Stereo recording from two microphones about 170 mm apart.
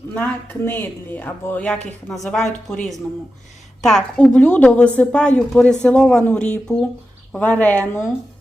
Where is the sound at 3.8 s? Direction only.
5° left (ahead or behind).